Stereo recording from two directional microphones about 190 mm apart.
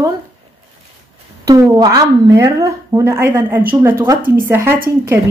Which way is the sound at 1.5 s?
20° right (ahead or behind).